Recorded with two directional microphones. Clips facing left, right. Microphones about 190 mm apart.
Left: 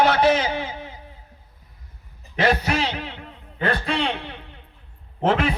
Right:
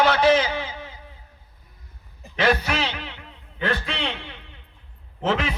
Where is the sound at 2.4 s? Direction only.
40° left (ahead or behind); by 5.5 s 55° left (ahead or behind).